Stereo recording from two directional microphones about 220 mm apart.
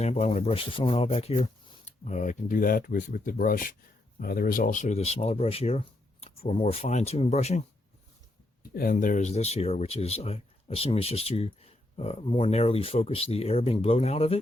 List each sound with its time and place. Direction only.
0.0 s speech: 30° left (ahead or behind)
8.7 s speech: 40° left (ahead or behind)